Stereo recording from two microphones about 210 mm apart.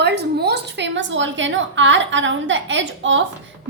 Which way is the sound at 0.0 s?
55° right (ahead or behind).